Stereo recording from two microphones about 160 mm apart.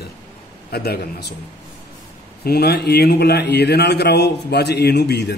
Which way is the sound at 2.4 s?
85° left.